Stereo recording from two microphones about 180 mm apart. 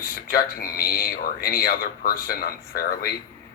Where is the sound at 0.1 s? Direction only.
55° left (ahead or behind).